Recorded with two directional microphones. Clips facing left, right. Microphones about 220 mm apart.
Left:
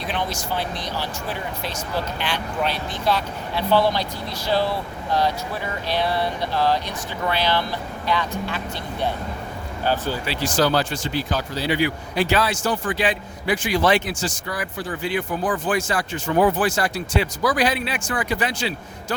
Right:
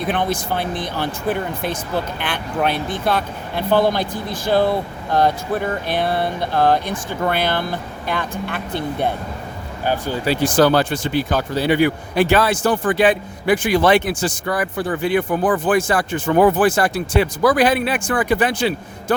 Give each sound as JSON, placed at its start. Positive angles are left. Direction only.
{"t": 0.0, "sound": "speech", "side_deg": -55}
{"t": 10.2, "sound": "speech", "side_deg": -55}